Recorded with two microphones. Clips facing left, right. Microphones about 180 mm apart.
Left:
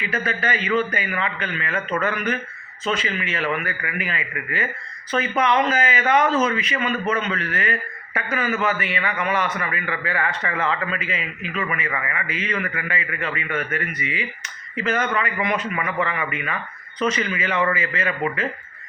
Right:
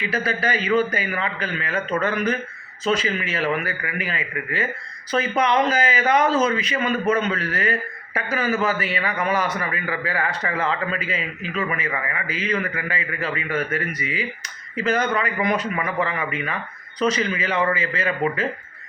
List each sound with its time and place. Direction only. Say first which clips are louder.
0.0 s a man's voice: right 1 dB; 35° right (ahead or behind)